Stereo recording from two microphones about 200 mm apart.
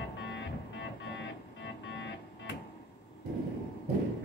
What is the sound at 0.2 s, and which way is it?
Music, 65° left (ahead or behind).